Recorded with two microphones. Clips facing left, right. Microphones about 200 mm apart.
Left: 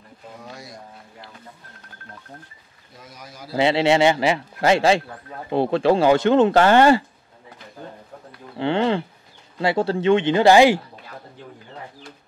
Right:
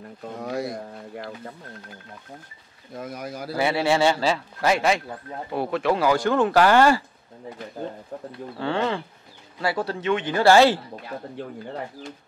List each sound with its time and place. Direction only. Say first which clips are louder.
0.4 s speech: right 13 dB; 60° right (ahead or behind)
3.0 s speech: right 9 dB; 55° right (ahead or behind)
3.5 s a man's voice: left 4 dB; 25° left (ahead or behind)
8.5 s a man's voice: left 5 dB; 25° left (ahead or behind)